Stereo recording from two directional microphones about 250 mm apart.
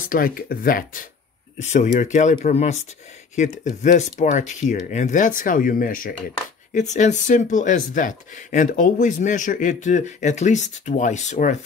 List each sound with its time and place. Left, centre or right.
0.0 s speech: left